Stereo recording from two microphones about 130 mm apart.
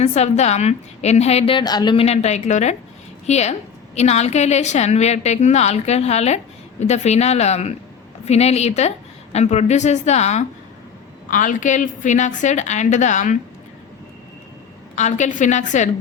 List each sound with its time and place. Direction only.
0.0 s a woman's voice: 55° left (ahead or behind); by 2.0 s 35° left (ahead or behind)
2.0 s a woman's voice: 60° left (ahead or behind)
11.3 s a woman's voice: 90° left; by 13.3 s 70° left (ahead or behind)
14.9 s a woman's voice: 65° left (ahead or behind)